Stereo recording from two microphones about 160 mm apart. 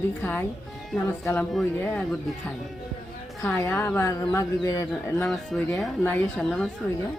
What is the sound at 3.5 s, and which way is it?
Speech, 15° left (ahead or behind).